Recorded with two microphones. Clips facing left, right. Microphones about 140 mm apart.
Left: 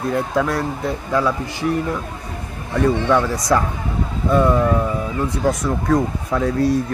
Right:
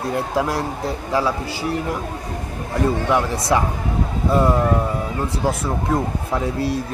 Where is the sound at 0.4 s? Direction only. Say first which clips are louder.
Left 1 dB; 30° right (ahead or behind).